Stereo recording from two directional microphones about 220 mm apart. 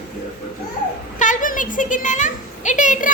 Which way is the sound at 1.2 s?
35° left (ahead or behind).